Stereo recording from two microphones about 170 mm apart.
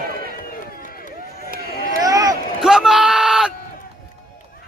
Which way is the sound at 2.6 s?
Centre (ahead or behind).